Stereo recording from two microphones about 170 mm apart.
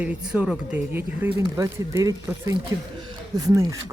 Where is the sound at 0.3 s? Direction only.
5° right (ahead or behind).